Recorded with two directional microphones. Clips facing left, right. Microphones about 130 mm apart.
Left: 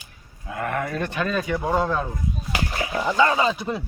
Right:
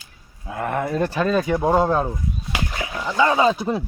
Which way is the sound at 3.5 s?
30° right (ahead or behind).